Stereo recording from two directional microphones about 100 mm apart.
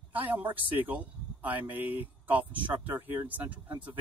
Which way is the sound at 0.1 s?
20° right (ahead or behind).